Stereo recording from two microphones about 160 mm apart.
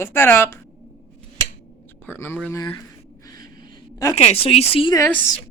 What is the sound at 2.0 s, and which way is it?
Speech, 15° left (ahead or behind).